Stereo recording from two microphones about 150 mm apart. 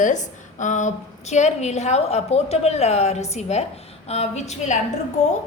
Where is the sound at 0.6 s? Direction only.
55° left (ahead or behind).